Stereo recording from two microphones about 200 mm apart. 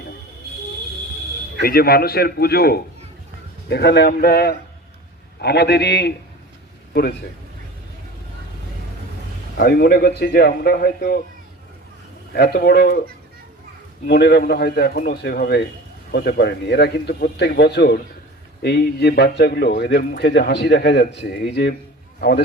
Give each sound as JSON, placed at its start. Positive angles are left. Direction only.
{"t": 1.6, "sound": "a man's voice", "side_deg": 50}
{"t": 9.6, "sound": "speech", "side_deg": 50}
{"t": 12.3, "sound": "speech", "side_deg": 50}
{"t": 14.1, "sound": "a man's voice", "side_deg": 55}